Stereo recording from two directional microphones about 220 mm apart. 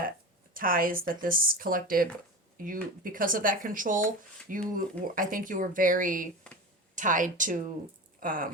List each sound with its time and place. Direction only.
0.5 s speech: 40° right (ahead or behind)